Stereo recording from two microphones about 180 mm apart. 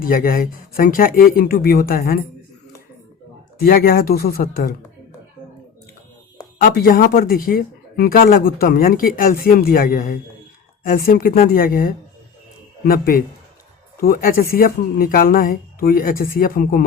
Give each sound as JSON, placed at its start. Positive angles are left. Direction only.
{"t": 0.0, "sound": "speech", "side_deg": 50}
{"t": 3.6, "sound": "speech", "side_deg": 55}
{"t": 6.6, "sound": "speech", "side_deg": 65}